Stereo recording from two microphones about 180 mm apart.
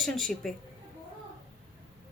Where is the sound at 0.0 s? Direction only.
Centre (ahead or behind).